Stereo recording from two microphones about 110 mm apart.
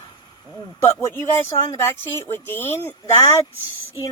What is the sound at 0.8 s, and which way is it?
Speech, 25° left (ahead or behind).